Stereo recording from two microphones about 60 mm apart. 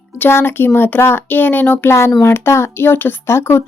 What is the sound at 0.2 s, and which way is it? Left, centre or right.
Speech, left.